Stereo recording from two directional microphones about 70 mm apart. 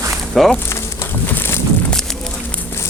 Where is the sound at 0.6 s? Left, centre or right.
Left.